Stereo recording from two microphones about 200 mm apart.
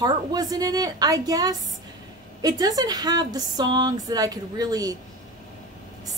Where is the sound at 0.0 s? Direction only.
20° right (ahead or behind).